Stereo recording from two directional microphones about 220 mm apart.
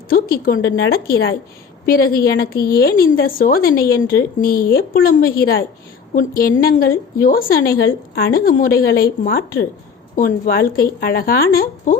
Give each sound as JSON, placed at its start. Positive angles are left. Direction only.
{"t": 0.1, "sound": "a woman's voice", "side_deg": 40}